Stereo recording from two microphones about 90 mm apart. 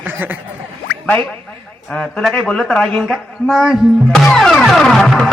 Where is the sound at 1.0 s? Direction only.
20° left (ahead or behind).